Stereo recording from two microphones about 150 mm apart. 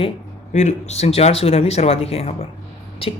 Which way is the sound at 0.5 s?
50° left (ahead or behind).